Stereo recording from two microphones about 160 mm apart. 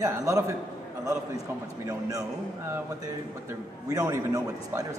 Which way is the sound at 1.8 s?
20° right (ahead or behind).